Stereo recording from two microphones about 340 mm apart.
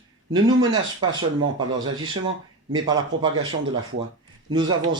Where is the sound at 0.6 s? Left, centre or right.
Right.